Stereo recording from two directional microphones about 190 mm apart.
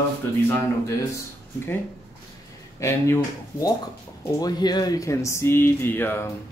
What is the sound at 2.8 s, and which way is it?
Speech, 15° left (ahead or behind).